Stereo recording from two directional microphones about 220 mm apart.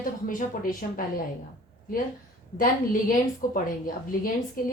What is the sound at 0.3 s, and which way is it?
Speech, 40° left (ahead or behind).